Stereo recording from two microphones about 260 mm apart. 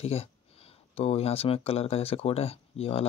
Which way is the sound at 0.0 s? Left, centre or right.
Left.